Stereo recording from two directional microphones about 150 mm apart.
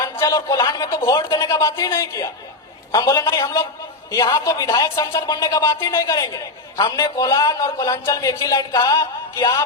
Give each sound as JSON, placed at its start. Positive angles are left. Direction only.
{"t": 0.0, "sound": "a woman's voice", "side_deg": 20}